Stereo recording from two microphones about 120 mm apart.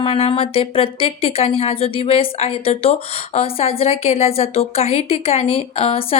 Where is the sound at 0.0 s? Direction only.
55° left (ahead or behind).